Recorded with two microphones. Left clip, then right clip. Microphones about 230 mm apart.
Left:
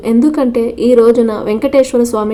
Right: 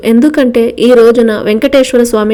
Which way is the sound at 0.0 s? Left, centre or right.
Right.